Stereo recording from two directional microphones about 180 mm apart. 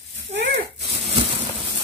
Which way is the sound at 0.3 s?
80° right.